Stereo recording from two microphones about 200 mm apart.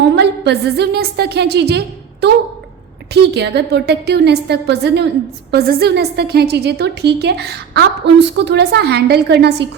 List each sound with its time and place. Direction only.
0.2 s a woman's voice: 55° right (ahead or behind)
3.1 s a woman's voice: 55° right (ahead or behind)